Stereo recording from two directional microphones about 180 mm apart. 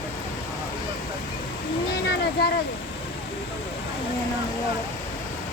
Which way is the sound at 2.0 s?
70° left (ahead or behind).